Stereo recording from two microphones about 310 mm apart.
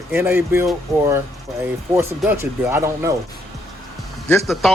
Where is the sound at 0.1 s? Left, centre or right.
Centre.